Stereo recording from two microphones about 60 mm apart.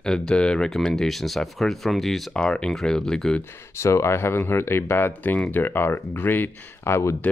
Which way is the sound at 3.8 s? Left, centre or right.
Left.